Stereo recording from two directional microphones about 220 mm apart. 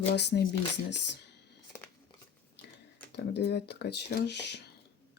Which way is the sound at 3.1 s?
50° left (ahead or behind).